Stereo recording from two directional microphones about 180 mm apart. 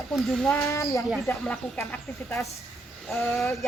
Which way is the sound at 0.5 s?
15° left (ahead or behind).